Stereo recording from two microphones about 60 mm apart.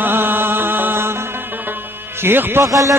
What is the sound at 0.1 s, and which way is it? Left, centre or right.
Music, right.